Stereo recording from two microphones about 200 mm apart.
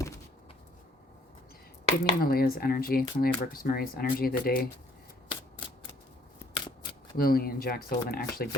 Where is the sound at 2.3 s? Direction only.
50° left (ahead or behind).